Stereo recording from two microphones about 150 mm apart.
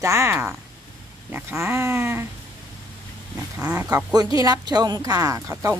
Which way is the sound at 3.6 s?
15° right (ahead or behind).